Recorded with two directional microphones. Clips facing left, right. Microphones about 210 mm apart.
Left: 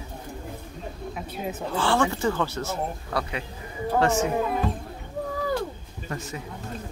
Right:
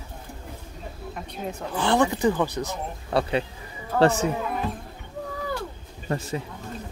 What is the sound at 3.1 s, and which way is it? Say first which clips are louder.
Speech: right 10 dB; 25° right (ahead or behind).